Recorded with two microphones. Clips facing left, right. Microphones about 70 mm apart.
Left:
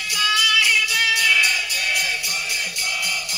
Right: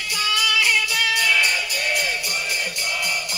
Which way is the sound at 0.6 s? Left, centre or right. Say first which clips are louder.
Left 1 dB; right.